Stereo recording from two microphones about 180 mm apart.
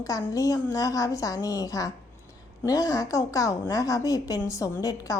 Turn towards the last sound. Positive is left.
turn(degrees=20)  # may be behind; listen again after turning